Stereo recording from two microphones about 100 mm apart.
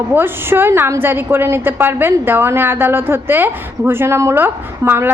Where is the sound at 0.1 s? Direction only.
20° right (ahead or behind).